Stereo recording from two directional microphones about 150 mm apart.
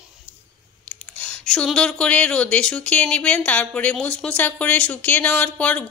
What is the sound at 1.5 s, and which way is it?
A woman's voice, 5° left (ahead or behind).